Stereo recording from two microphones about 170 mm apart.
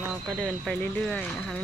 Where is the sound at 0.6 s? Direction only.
5° left (ahead or behind).